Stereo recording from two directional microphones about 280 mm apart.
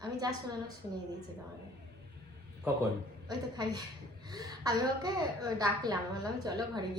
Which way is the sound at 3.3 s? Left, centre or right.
Centre.